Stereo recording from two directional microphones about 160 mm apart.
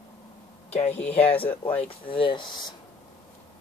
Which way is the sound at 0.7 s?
40° left (ahead or behind).